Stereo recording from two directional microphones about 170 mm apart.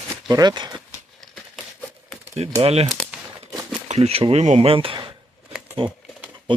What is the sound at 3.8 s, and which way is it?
Speech, 35° right (ahead or behind).